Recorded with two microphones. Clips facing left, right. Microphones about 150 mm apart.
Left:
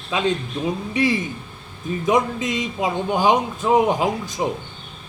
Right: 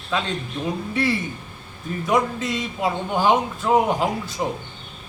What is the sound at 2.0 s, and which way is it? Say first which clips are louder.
A man's voice: left 2 dB; 20° left (ahead or behind).